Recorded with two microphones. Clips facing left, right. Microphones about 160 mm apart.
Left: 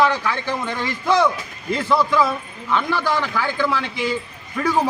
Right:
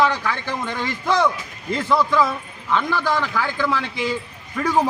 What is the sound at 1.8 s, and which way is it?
Speech, 15° right (ahead or behind).